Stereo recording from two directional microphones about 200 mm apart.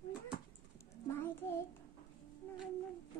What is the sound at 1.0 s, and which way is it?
Speech, 10° left (ahead or behind).